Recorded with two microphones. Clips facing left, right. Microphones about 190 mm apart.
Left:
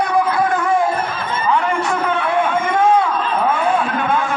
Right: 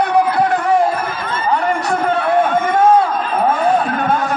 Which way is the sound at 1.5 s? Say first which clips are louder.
Right 1 dB; 40° right (ahead or behind).